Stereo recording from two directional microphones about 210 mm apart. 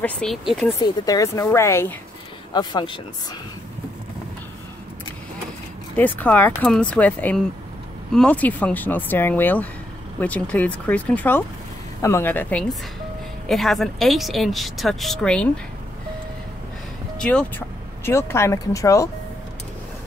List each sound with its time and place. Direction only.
0.0 s a woman's voice: centre (ahead or behind)
0.7 s speech: 15° left (ahead or behind)
5.9 s a woman's voice: 10° left (ahead or behind)
17.2 s speech: 5° left (ahead or behind)